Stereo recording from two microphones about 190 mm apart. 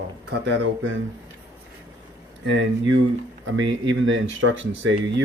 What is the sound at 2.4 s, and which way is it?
Speech, 80° right.